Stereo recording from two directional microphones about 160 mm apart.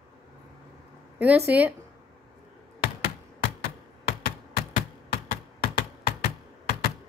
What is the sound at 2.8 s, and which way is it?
Computer keyboard, 75° left (ahead or behind).